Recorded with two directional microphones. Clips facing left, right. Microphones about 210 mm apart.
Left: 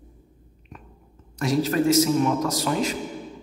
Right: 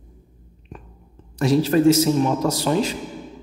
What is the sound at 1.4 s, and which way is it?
A man's voice, 30° right (ahead or behind).